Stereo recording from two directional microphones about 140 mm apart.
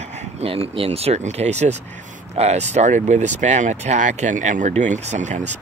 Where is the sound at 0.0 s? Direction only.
55° right (ahead or behind).